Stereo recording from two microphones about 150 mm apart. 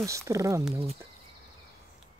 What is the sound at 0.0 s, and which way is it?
Speech, 20° right (ahead or behind).